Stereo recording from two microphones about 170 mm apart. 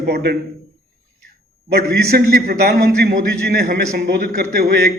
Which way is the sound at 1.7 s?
65° right (ahead or behind).